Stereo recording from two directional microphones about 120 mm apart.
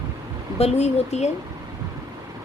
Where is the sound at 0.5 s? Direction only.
60° left (ahead or behind).